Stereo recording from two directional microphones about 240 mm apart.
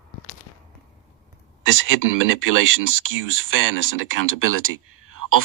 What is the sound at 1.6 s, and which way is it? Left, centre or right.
Speech, right.